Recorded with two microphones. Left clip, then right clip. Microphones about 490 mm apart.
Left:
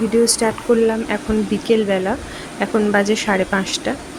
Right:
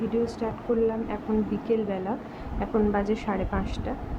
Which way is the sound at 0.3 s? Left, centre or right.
Right.